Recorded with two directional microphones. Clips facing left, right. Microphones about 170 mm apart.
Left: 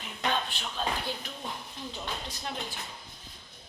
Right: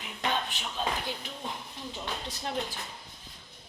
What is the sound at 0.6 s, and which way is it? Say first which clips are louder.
Speech: even; 15° right (ahead or behind).